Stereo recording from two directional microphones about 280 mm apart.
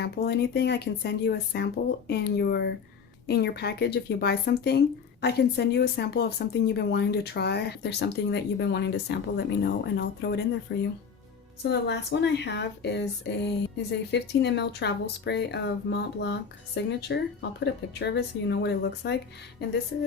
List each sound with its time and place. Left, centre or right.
0.0 s speech: left